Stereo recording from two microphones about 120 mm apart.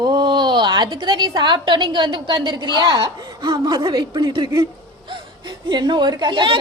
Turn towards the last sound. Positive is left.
turn(degrees=-40)  # may be behind; listen again after turning